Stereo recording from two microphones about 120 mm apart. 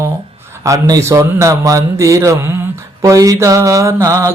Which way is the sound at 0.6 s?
25° right (ahead or behind).